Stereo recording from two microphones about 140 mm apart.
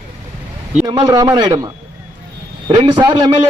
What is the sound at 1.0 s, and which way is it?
A man's voice, 30° right (ahead or behind).